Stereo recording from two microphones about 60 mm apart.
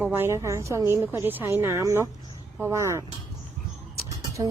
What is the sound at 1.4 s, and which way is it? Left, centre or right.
A woman's voice, right.